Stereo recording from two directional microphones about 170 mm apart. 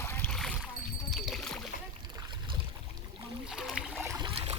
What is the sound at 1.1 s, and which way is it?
Rowboat, centre (ahead or behind).